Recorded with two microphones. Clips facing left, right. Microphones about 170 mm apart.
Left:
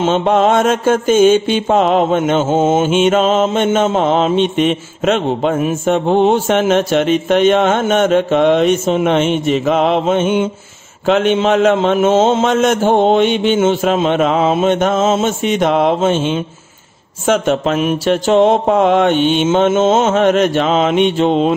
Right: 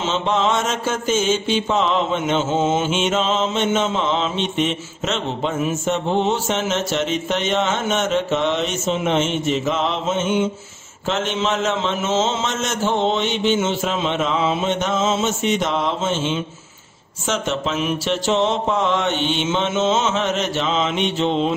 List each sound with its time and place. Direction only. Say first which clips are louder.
0.0 s mantra: left 8 dB; 50° left (ahead or behind)
17.3 s speech: left 9 dB; 55° left (ahead or behind)